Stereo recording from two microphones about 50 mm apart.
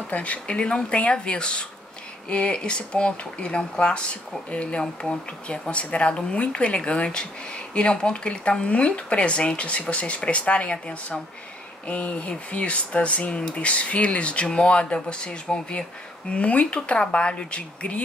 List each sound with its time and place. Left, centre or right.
0.1 s speech: left